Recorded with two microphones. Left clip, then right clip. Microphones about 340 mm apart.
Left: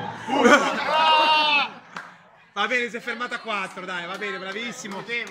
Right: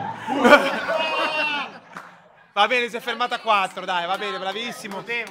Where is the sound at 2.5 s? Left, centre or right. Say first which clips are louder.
Right 4 dB; centre.